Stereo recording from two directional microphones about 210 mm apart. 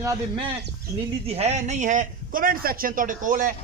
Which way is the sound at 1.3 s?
30° right (ahead or behind).